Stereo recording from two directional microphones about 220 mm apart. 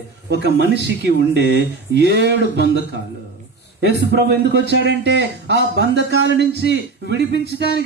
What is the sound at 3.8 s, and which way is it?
A man's voice, 50° right (ahead or behind).